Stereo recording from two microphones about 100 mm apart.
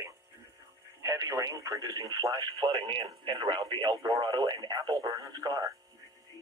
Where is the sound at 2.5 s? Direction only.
55° right (ahead or behind).